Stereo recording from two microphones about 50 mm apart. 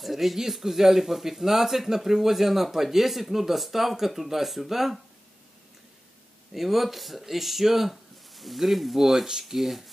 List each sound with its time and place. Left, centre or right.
0.0 s speech: centre
6.5 s speech: centre